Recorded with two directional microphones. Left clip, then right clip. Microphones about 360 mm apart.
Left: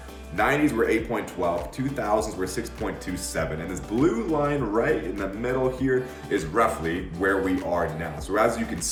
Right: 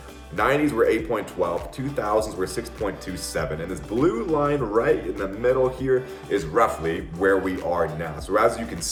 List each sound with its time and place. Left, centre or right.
0.3 s speech: centre
4.0 s a man's voice: centre